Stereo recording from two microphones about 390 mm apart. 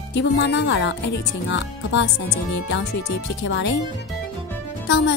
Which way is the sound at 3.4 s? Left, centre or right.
Left.